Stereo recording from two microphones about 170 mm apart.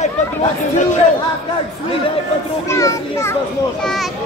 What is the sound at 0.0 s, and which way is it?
Chatter, 40° left (ahead or behind).